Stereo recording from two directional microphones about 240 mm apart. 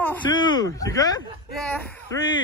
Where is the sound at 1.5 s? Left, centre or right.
Centre.